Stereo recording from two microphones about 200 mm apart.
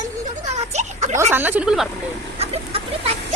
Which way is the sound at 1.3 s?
10° right (ahead or behind).